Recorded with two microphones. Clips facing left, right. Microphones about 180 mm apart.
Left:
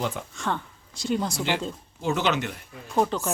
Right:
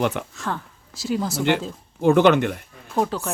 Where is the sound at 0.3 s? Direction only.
Centre (ahead or behind).